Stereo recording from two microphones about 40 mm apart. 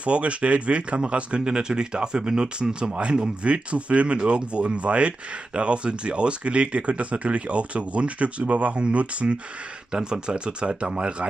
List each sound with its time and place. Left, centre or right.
0.0 s speech: right
9.9 s speech: right